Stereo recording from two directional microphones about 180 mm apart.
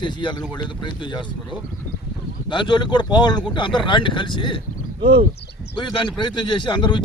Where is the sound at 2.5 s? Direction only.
25° left (ahead or behind).